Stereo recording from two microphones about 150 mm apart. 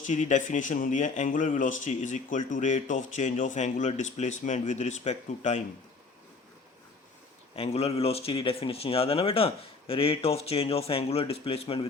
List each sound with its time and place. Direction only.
0.0 s speech: 55° left (ahead or behind)
7.5 s speech: 40° left (ahead or behind)